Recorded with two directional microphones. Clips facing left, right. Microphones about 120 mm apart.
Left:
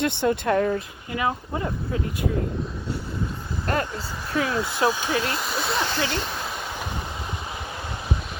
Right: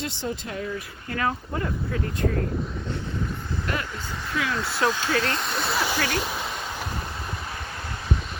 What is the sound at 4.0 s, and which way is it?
Speech, 5° left (ahead or behind).